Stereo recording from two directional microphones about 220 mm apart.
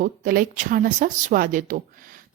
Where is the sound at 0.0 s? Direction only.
40° right (ahead or behind).